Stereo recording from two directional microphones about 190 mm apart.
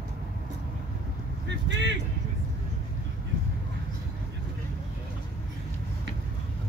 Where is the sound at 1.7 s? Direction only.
65° right (ahead or behind).